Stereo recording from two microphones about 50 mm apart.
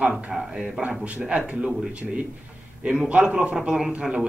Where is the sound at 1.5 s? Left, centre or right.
Right.